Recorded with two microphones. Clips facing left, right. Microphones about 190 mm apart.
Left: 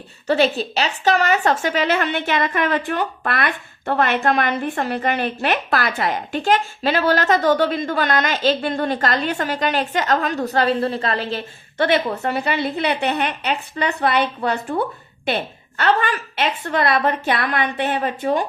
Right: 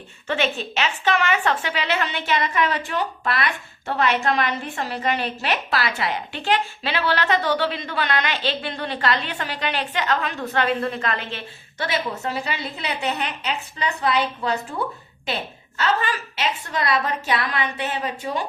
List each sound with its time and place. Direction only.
0.3 s a woman's voice: 35° left (ahead or behind)
11.8 s a woman's voice: 60° left (ahead or behind)